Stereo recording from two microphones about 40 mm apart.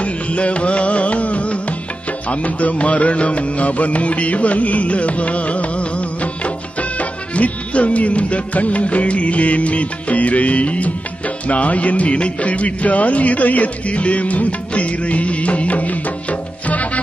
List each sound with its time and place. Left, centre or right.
0.0 s music: left